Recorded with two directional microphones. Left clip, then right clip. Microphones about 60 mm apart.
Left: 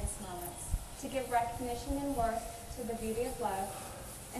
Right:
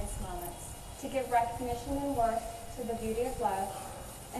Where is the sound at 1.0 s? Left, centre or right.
Left.